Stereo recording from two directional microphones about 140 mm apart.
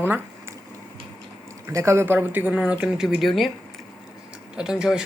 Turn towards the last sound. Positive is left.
turn(degrees=-5)  # may be behind; listen again after turning